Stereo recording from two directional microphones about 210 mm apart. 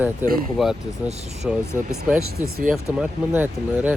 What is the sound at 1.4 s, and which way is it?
Speech, centre (ahead or behind).